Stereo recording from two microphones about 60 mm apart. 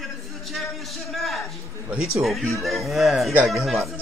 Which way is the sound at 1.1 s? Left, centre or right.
Centre.